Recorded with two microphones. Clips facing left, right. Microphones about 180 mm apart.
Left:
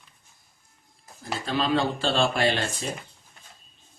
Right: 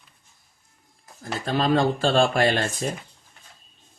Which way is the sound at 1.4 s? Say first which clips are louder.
Right 4 dB; 45° right (ahead or behind).